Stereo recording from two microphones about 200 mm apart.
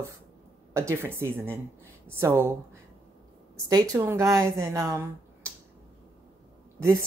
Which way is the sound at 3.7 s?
15° right (ahead or behind).